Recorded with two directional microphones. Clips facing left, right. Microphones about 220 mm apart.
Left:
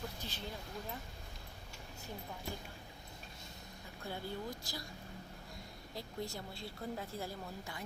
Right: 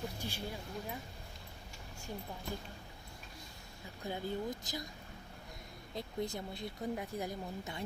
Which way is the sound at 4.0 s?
20° right (ahead or behind).